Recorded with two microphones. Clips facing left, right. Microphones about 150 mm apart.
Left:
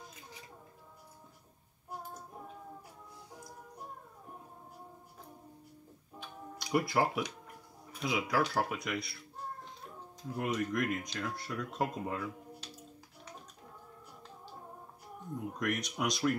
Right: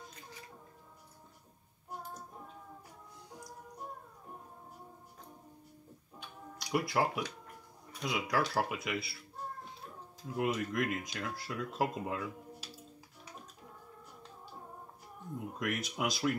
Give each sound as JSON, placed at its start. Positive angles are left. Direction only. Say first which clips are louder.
{"t": 6.1, "sound": "a sound", "louder": "left 3 dB", "side_deg": 0}
{"t": 7.9, "sound": "speech", "louder": "left 1 dB", "side_deg": 5}
{"t": 10.4, "sound": "speech", "louder": "even", "side_deg": -5}
{"t": 15.6, "sound": "speech", "louder": "left 1 dB", "side_deg": 0}